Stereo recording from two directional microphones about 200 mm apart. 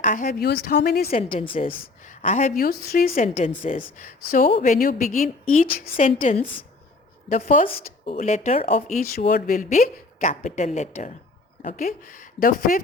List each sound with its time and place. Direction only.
0.0 s a woman's voice: 40° left (ahead or behind)
1.6 s a woman's voice: 40° left (ahead or behind)
7.7 s a woman's voice: 30° left (ahead or behind)
9.1 s a woman's voice: 45° left (ahead or behind)